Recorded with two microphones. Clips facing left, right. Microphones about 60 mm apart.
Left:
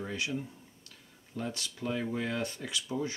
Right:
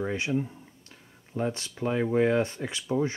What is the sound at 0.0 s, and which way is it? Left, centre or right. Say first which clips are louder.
Speech: right 7 dB; right.